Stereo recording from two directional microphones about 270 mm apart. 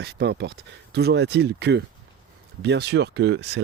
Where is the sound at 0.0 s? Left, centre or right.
Right.